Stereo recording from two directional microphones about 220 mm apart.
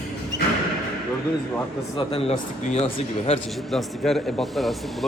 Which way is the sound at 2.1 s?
25° left (ahead or behind).